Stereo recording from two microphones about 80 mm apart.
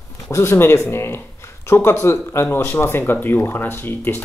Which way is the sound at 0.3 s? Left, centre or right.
Left.